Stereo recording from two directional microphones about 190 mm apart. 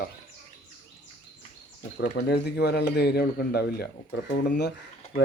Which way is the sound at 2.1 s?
60° left (ahead or behind).